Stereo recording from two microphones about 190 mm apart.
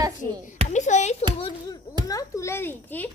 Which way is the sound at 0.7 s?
40° left (ahead or behind).